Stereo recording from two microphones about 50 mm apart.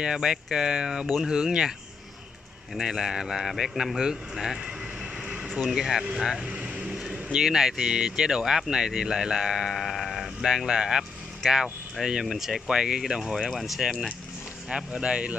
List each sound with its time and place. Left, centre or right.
0.0 s speech: centre
2.8 s speech: centre
6.4 s vehicle: right
7.3 s speech: centre
9.8 s sheep: centre
10.7 s speech: centre
12.7 s speech: centre
13.5 s speech: centre
14.7 s speech: centre